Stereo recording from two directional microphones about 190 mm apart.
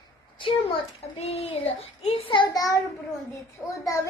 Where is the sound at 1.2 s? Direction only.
30° left (ahead or behind).